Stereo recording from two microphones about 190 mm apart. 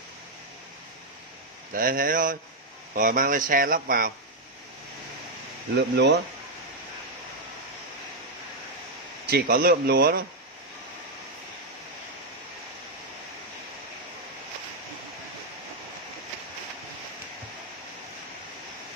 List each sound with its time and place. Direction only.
1.7 s speech: 45° right (ahead or behind)
5.8 s speech: 60° right (ahead or behind)
9.3 s speech: 50° right (ahead or behind)